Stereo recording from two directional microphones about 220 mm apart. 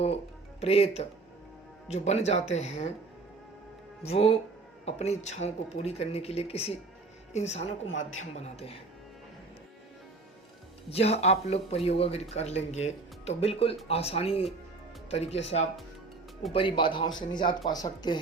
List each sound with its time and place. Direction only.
0.6 s speech: 25° left (ahead or behind)
4.0 s speech: 25° left (ahead or behind)
7.9 s a man's voice: 60° left (ahead or behind)
8.4 s speech: 25° left (ahead or behind)
10.9 s speech: 30° left (ahead or behind)
16.5 s speech: 25° left (ahead or behind)